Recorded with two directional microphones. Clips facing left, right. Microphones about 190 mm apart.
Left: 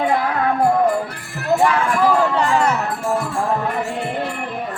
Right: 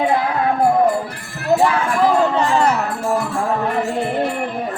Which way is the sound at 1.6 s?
20° right (ahead or behind).